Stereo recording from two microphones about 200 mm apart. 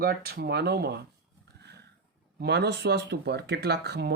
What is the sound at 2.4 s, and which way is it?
Speech, 55° right (ahead or behind).